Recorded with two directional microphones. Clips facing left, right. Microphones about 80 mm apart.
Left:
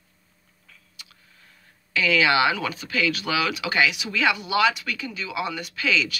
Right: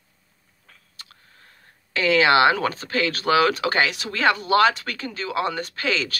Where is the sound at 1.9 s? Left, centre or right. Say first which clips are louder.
Right 3 dB; right.